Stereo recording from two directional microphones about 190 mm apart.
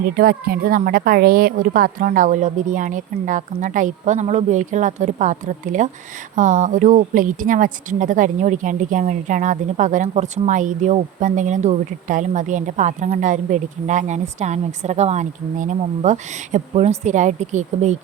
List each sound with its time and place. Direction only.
0.0 s a woman's voice: 50° right (ahead or behind)